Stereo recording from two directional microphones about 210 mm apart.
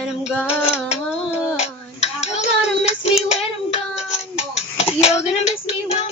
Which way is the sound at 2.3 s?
30° left (ahead or behind).